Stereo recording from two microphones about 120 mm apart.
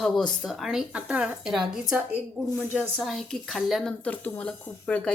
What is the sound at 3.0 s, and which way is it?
Speech, 5° left (ahead or behind).